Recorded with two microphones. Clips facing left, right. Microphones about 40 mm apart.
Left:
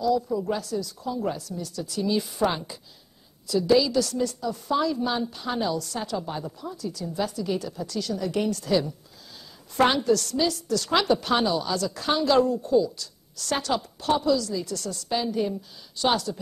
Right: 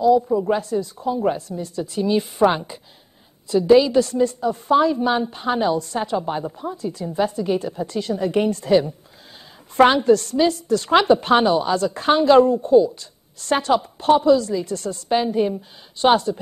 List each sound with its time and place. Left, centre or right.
0.1 s a woman's voice: right